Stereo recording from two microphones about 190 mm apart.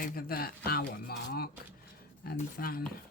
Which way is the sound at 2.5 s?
50° left (ahead or behind).